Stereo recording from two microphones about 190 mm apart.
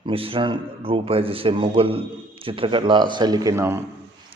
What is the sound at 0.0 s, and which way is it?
A man's voice, 30° right (ahead or behind).